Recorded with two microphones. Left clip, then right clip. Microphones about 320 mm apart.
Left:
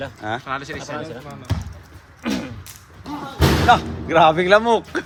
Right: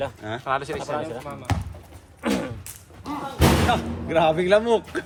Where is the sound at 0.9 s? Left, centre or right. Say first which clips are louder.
Right 1 dB; right.